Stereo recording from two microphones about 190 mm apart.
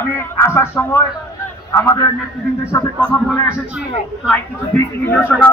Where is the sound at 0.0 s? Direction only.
10° left (ahead or behind).